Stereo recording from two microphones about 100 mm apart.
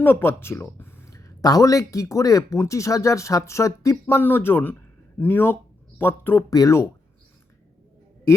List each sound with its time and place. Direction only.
0.0 s speech: 20° left (ahead or behind)
4.0 s speech: 20° left (ahead or behind)
6.5 s speech: 35° left (ahead or behind)